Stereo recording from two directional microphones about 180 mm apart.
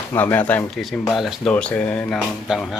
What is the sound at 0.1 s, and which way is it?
Speech, 10° left (ahead or behind).